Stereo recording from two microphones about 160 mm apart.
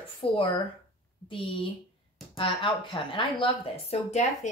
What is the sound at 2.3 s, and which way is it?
Speech, 30° left (ahead or behind).